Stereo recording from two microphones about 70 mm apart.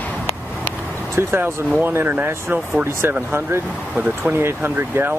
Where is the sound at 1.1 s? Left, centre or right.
Right.